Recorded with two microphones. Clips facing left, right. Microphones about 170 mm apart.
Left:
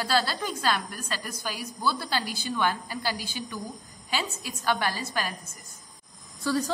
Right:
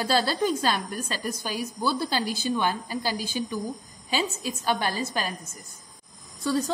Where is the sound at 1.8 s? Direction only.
20° right (ahead or behind).